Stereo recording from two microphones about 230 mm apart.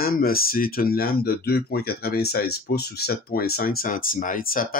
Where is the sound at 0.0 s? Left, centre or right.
Left.